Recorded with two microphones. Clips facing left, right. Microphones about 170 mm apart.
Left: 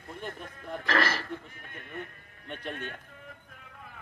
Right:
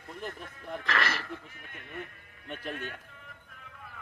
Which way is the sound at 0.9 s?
35° left (ahead or behind).